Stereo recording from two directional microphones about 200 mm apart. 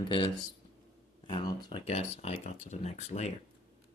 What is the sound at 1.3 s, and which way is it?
Speech, 20° left (ahead or behind).